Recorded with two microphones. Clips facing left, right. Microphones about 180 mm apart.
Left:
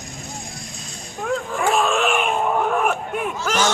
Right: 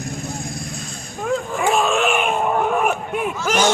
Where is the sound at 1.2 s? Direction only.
Centre (ahead or behind).